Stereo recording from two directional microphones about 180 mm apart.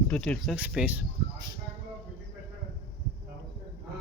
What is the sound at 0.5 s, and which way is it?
Speech, 5° right (ahead or behind).